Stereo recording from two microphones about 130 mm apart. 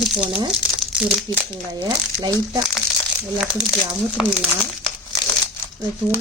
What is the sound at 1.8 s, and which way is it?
Speech, 30° right (ahead or behind).